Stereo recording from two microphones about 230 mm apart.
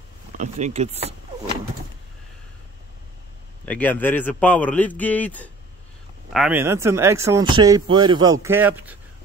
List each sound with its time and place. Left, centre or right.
0.4 s speech: right
3.6 s a man's voice: centre
6.3 s speech: centre